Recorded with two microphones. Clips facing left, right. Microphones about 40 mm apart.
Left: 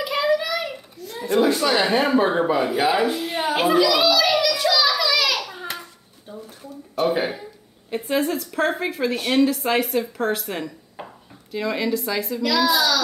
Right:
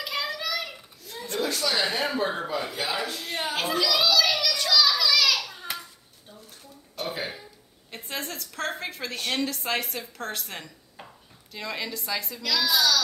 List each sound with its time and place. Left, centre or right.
0.0 s a sound: centre
1.4 s speech: left
5.8 s a sound: centre
7.9 s a woman's voice: centre
11.0 s dishes: centre
11.5 s a woman's voice: centre